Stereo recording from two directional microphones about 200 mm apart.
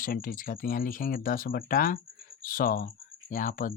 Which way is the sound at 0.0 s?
45° left (ahead or behind).